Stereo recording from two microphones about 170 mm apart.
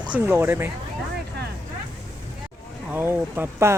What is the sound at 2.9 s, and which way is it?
Speech, 10° right (ahead or behind).